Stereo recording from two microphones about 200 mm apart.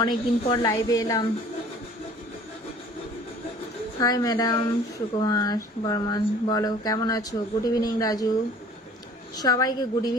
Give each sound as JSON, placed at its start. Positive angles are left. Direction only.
{"t": 0.0, "sound": "speech", "side_deg": 20}
{"t": 4.0, "sound": "speech", "side_deg": 20}